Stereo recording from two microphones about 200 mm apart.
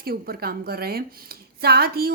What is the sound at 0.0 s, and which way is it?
Speech, 50° right (ahead or behind).